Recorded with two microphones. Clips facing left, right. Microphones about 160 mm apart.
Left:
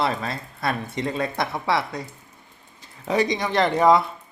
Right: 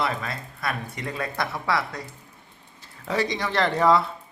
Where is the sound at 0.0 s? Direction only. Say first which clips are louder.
Left 3 dB; 30° left (ahead or behind).